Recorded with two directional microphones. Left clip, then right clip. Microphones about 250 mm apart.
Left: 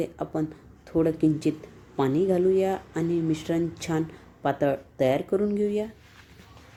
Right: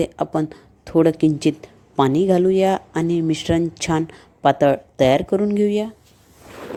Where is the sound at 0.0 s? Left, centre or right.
Right.